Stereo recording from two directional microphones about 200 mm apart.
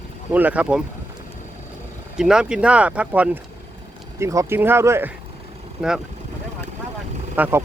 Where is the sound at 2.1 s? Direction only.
5° right (ahead or behind).